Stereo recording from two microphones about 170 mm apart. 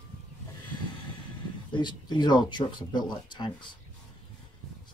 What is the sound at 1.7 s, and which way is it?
Speech, 25° left (ahead or behind).